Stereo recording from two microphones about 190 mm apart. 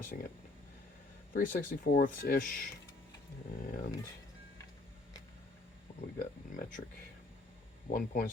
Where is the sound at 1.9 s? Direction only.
50° left (ahead or behind).